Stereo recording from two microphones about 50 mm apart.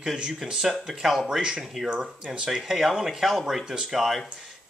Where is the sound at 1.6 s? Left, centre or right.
Centre.